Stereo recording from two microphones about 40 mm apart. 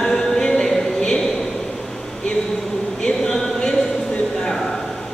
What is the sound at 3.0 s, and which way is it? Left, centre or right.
Chant, centre.